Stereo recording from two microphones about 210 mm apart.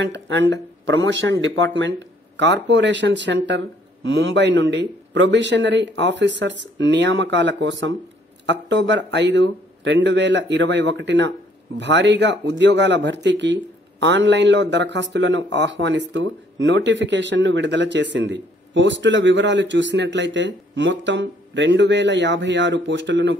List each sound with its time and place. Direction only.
0.0 s speech: 60° right (ahead or behind)